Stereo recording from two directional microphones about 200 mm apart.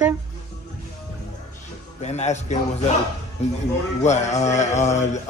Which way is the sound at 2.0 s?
35° left (ahead or behind).